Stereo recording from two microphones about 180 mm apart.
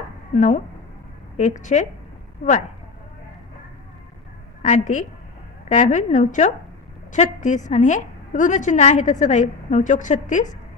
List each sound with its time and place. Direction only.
0.3 s a woman's voice: 45° left (ahead or behind)
4.6 s a woman's voice: 40° left (ahead or behind)